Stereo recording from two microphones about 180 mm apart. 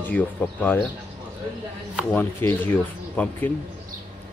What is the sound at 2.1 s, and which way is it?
Speech, 10° left (ahead or behind).